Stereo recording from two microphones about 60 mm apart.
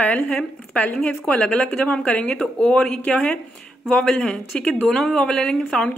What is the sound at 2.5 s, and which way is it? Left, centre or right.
Speech, centre.